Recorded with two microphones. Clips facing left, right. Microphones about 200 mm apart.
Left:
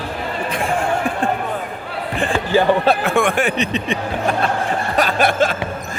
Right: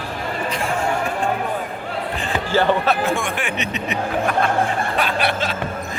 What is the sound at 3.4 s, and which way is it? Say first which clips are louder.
Speech: left 6 dB; 35° left (ahead or behind).